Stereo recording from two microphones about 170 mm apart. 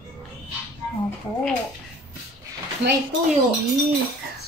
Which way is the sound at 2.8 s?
90° right.